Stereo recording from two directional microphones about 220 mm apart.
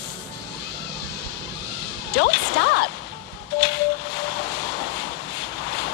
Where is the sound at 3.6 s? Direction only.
50° left (ahead or behind).